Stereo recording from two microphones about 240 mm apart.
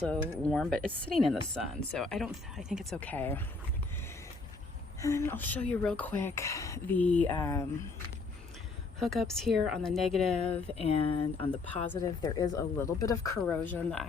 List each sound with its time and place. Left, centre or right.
0.1 s speech: centre
4.9 s speech: centre
9.0 s speech: centre
10.4 s speech: left
11.9 s speech: centre